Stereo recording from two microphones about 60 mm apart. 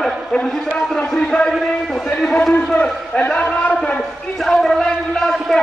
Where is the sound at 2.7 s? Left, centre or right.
Centre.